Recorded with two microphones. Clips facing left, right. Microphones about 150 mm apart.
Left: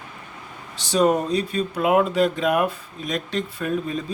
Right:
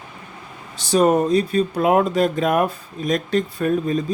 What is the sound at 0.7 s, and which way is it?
Speech, 45° right (ahead or behind).